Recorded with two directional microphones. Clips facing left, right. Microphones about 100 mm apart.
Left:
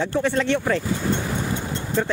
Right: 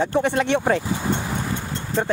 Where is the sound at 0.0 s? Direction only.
20° right (ahead or behind).